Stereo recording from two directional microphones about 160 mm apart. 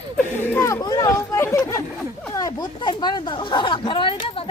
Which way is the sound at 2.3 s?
25° left (ahead or behind).